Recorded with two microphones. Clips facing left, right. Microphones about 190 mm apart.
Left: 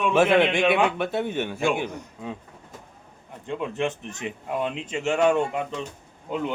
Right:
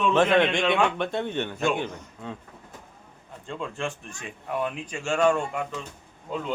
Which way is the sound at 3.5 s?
20° left (ahead or behind).